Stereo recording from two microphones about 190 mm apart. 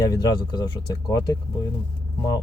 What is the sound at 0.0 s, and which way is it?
Speech, 20° left (ahead or behind).